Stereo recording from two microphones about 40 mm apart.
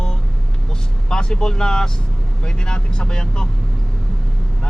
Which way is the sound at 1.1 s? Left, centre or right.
Centre.